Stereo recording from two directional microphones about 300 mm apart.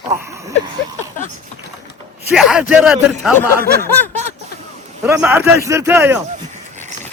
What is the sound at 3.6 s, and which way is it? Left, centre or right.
Snicker, right.